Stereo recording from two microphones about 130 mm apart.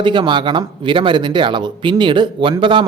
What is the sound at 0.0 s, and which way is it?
A man's voice, 35° right (ahead or behind).